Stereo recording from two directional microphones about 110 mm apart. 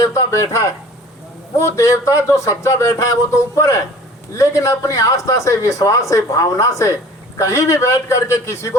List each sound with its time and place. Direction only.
0.0 s speech: 30° left (ahead or behind)